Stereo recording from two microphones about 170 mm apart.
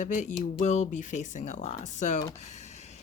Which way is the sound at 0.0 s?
45° left (ahead or behind).